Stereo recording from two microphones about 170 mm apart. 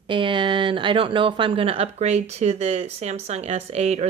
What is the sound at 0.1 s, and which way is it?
A woman's voice, 30° right (ahead or behind).